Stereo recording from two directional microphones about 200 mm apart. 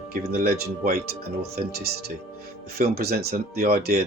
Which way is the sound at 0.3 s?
50° right (ahead or behind).